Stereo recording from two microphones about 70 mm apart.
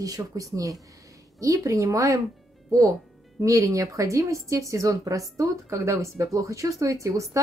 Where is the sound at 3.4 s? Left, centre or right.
Right.